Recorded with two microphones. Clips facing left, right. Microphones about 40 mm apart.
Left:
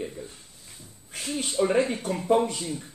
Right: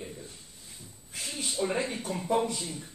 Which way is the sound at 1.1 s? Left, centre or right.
Left.